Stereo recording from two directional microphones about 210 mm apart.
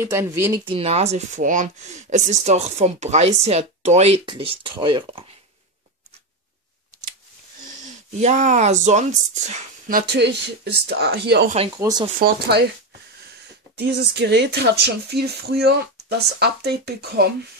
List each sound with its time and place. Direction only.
0.0 s speech: 10° right (ahead or behind)
0.7 s speech: 30° right (ahead or behind)
8.1 s speech: 35° right (ahead or behind); by 11.5 s 50° right (ahead or behind)
11.5 s speech: 25° right (ahead or behind)
12.2 s speech: 50° right (ahead or behind)
13.7 s speech: 50° right (ahead or behind)